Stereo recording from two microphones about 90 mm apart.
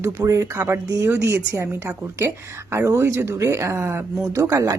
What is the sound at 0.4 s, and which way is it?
A woman's voice, 20° right (ahead or behind).